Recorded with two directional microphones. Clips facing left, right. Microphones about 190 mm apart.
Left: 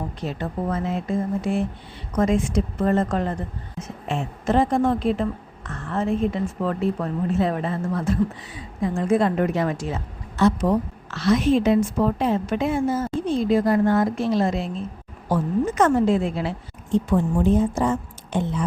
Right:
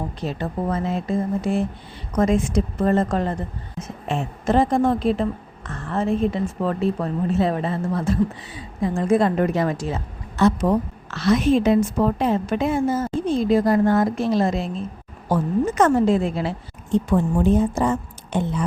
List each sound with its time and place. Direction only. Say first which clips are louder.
0.2 s a woman's voice: right 2 dB; 35° right (ahead or behind)
10.3 s a woman's voice: right 1 dB; 60° right (ahead or behind)
11.5 s a woman's voice: right 1 dB; 45° right (ahead or behind)
17.1 s a woman's voice: right 1 dB; 65° right (ahead or behind)